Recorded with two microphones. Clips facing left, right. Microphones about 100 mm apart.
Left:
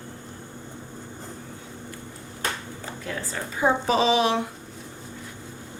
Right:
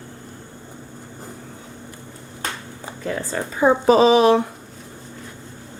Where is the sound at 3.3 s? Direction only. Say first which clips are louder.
Right 5 dB; 45° right (ahead or behind).